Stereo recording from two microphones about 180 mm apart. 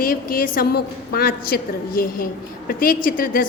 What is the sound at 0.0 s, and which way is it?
A woman's voice, 55° left (ahead or behind).